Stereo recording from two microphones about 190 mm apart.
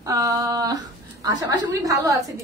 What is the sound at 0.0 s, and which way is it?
A woman's voice, 20° right (ahead or behind).